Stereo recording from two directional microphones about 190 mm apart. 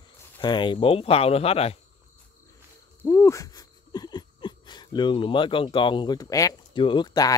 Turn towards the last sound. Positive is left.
turn(degrees=20)  # may be behind; listen again after turning